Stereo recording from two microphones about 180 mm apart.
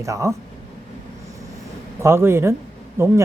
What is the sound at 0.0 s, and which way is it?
Speech, 20° right (ahead or behind).